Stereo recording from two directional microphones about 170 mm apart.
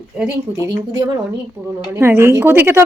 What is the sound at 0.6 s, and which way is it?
A woman's voice, 15° right (ahead or behind).